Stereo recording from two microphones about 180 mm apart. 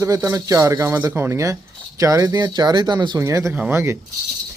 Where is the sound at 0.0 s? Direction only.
15° right (ahead or behind).